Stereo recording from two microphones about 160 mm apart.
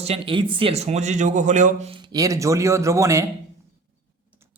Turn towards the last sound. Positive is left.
turn(degrees=-20)  # may be behind; listen again after turning